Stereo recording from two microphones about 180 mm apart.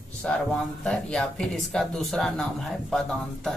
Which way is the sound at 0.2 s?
5° left (ahead or behind).